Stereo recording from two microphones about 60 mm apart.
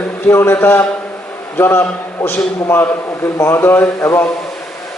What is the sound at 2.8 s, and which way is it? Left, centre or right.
A man's voice, left.